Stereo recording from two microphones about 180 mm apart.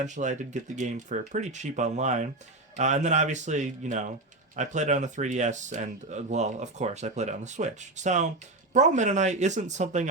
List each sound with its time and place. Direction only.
0.0 s speech: 40° right (ahead or behind)